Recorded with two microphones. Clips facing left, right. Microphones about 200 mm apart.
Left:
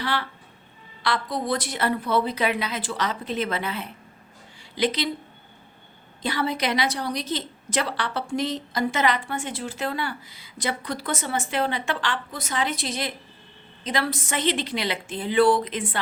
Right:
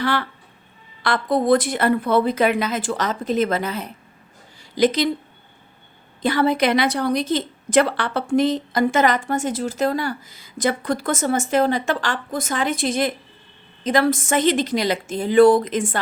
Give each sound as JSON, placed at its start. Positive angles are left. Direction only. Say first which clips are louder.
{"t": 0.0, "sound": "a woman's voice", "louder": "right 6 dB", "side_deg": -50}
{"t": 6.2, "sound": "a woman's voice", "louder": "right 7 dB", "side_deg": -55}